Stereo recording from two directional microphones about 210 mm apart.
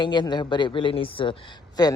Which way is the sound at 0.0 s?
20° left (ahead or behind).